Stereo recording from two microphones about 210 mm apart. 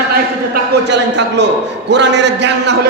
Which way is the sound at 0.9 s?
55° right (ahead or behind).